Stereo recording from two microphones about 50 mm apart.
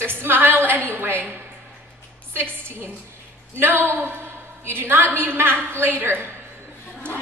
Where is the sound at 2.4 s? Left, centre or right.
Right.